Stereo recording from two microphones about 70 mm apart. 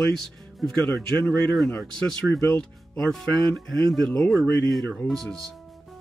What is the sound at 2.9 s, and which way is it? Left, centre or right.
Speech, centre.